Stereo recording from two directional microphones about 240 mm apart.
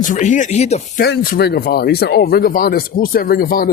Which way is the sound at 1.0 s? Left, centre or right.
Left.